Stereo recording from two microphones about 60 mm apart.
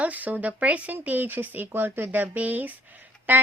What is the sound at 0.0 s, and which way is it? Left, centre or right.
Speech, right.